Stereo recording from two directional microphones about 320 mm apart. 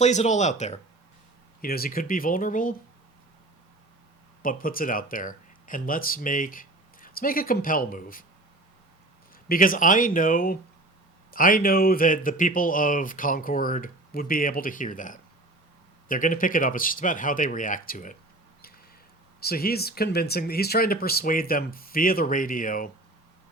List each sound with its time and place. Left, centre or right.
0.0 s speech: left
4.4 s speech: left
9.5 s speech: left
19.4 s speech: left